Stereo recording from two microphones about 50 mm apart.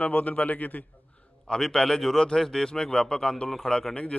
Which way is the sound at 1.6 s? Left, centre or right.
Centre.